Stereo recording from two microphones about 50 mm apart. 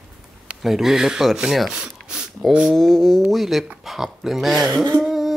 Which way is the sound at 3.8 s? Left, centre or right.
Centre.